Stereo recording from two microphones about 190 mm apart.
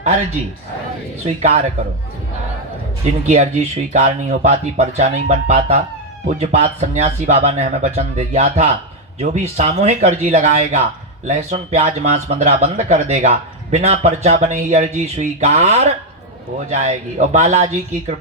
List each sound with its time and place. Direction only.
0.0 s speech: 35° right (ahead or behind)
1.4 s speech: 35° right (ahead or behind)
3.2 s speech: 35° right (ahead or behind)